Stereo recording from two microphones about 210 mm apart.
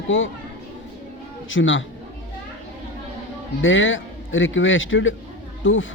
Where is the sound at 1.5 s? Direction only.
65° left (ahead or behind).